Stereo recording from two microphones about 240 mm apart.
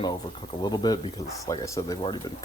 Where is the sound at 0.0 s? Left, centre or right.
Centre.